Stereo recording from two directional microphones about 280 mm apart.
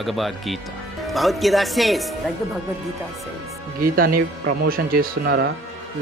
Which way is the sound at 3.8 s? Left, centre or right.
Right.